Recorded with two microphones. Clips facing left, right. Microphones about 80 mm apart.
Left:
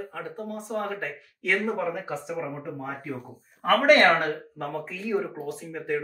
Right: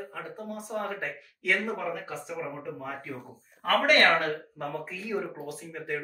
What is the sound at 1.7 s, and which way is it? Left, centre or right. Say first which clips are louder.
Speech: left 4 dB; centre.